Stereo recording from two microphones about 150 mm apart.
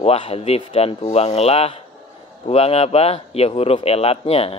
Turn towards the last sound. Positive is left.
turn(degrees=40)  # may be behind; listen again after turning